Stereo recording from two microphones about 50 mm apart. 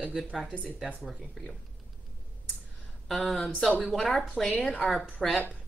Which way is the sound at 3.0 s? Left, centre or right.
Centre.